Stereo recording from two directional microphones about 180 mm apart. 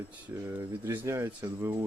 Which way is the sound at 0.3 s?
10° right (ahead or behind).